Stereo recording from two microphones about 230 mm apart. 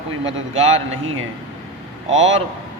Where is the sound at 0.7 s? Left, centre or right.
Right.